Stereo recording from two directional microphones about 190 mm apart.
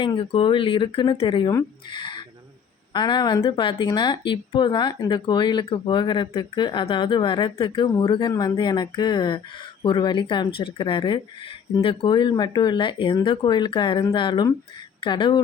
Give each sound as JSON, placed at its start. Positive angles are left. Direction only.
{"t": 0.0, "sound": "speech", "side_deg": 30}